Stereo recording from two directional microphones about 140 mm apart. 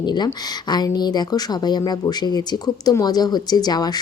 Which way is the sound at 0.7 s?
30° left (ahead or behind).